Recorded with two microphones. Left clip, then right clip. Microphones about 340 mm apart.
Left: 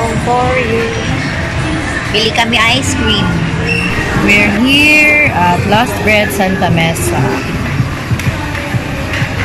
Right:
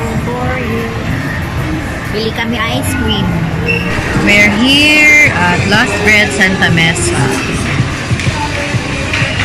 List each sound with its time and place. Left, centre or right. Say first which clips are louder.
2.1 s a woman's voice: left 6 dB; centre
4.3 s a woman's voice: right 2 dB; centre